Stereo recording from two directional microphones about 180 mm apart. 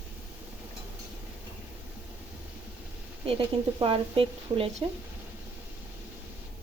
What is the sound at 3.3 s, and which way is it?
Speech, 30° right (ahead or behind).